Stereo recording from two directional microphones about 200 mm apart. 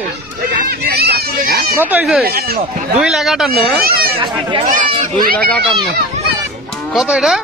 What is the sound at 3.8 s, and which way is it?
Chatter, 50° right (ahead or behind).